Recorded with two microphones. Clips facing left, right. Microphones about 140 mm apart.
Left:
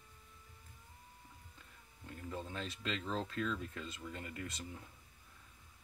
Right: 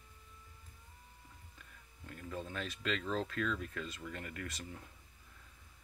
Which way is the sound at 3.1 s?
25° left (ahead or behind).